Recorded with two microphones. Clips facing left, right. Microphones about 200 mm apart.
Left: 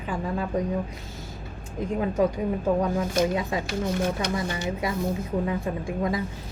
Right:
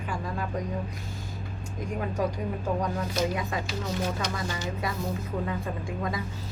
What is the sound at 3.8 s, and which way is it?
Speech, 55° left (ahead or behind).